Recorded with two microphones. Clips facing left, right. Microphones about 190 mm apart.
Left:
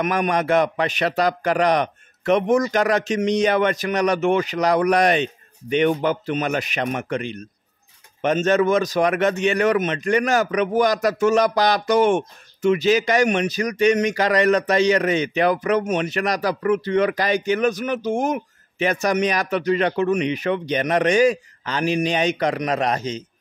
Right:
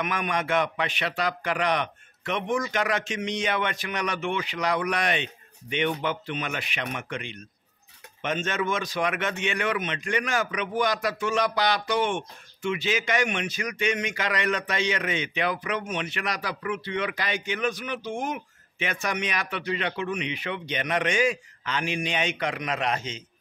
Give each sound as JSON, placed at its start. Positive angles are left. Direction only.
{"t": 0.0, "sound": "a man's voice", "side_deg": 40}